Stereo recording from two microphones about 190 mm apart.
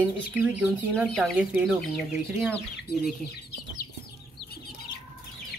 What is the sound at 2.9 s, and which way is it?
Speech, 60° left (ahead or behind).